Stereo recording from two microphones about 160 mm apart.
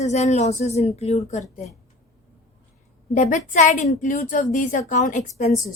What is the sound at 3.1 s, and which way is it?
A woman's voice, 50° left (ahead or behind).